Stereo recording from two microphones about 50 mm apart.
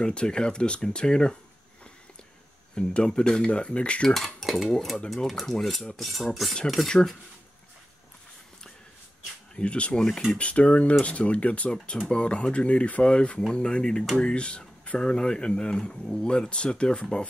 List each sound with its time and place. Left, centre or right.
0.0 s speech: centre
2.7 s speech: centre
4.1 s cutlery: centre
6.9 s speech: centre
9.6 s speech: left
9.9 s speech: centre
10.3 s speech: left